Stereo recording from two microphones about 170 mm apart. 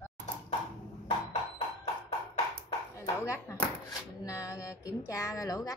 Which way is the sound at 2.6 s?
15° left (ahead or behind).